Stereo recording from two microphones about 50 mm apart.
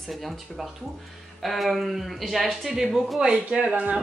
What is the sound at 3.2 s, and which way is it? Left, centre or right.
Speech, centre.